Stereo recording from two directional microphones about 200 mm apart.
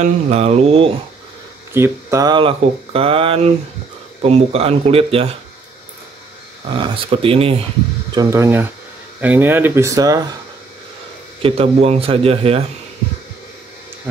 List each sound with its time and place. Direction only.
0.0 s speech: 35° right (ahead or behind)
1.7 s speech: 15° right (ahead or behind); by 5.3 s 30° right (ahead or behind)
6.8 s speech: 25° right (ahead or behind)
8.1 s speech: 15° right (ahead or behind)
11.4 s speech: 30° right (ahead or behind)